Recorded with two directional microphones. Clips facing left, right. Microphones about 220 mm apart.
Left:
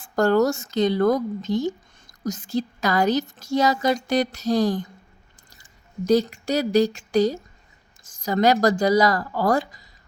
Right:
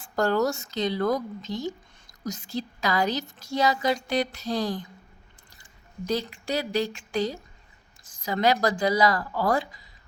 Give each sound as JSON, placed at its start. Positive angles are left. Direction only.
{"t": 0.0, "sound": "a woman's voice", "side_deg": 45}
{"t": 6.1, "sound": "a woman's voice", "side_deg": 45}